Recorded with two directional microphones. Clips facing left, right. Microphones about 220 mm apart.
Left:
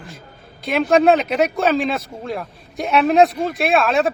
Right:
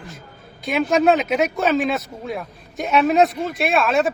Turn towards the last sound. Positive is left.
turn(degrees=0)  # may be behind; listen again after turning